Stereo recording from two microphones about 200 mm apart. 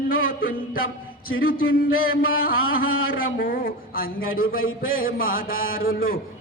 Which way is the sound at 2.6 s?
90° left.